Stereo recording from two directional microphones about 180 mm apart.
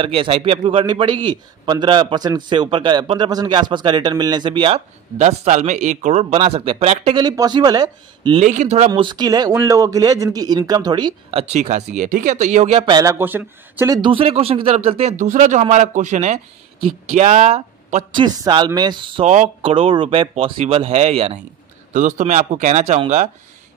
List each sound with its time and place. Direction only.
0.0 s a man's voice: 30° right (ahead or behind)
8.4 s speech: 40° right (ahead or behind)
9.0 s a man's voice: 25° right (ahead or behind); by 12.8 s 40° right (ahead or behind)
12.8 s a man's voice: 20° right (ahead or behind)
19.2 s speech: 40° right (ahead or behind)